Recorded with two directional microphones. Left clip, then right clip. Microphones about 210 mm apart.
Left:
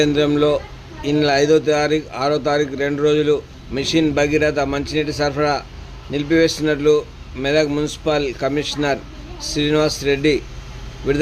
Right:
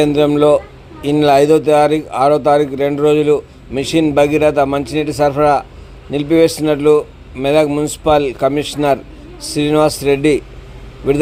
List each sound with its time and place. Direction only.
0.0 s speech: 15° right (ahead or behind)